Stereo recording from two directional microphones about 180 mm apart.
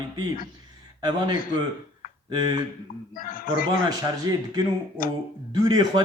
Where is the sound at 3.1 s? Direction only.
50° left (ahead or behind).